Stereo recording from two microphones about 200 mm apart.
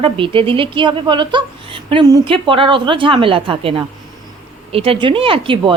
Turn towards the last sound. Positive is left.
turn(degrees=-25)  # may be behind; listen again after turning